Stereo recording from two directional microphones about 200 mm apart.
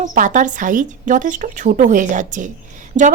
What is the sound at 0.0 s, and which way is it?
A woman's voice, 40° right (ahead or behind).